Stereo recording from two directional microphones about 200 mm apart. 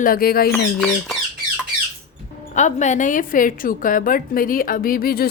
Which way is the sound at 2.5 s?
35° left (ahead or behind).